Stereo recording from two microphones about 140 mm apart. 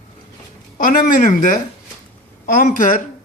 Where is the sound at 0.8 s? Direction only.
85° left.